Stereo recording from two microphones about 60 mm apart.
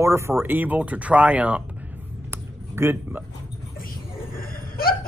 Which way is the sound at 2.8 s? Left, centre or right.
Right.